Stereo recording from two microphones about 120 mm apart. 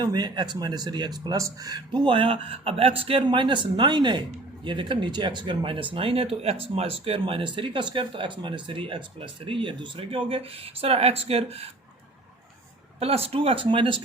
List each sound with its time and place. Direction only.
0.0 s speech: 35° right (ahead or behind); by 11.7 s 55° right (ahead or behind)
13.0 s speech: 55° right (ahead or behind)